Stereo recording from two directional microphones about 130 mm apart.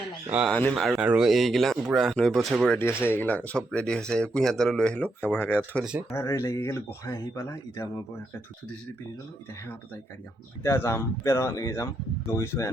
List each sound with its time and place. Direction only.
0.3 s speech: 10° right (ahead or behind)
0.5 s speech: 5° left (ahead or behind)
2.7 s speech: 15° left (ahead or behind)
5.8 s speech: 5° right (ahead or behind)
6.1 s speech: 20° left (ahead or behind)
10.6 s speech: 20° left (ahead or behind)